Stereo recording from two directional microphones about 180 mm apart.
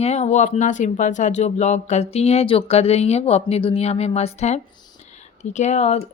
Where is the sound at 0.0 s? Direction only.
35° left (ahead or behind).